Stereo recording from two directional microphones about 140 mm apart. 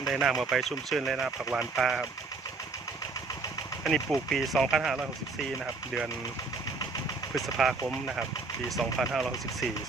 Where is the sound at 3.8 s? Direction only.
Centre (ahead or behind).